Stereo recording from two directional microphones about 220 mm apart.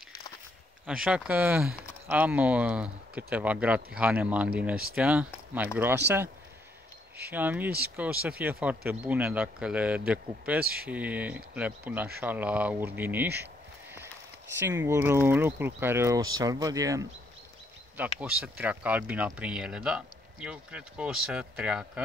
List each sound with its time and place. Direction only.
0.8 s speech: 5° right (ahead or behind)
7.3 s speech: 10° right (ahead or behind)
14.9 s speech: 10° right (ahead or behind)